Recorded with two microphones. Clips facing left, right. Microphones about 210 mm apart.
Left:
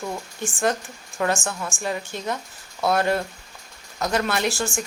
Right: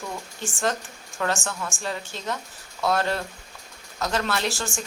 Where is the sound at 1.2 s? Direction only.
15° left (ahead or behind).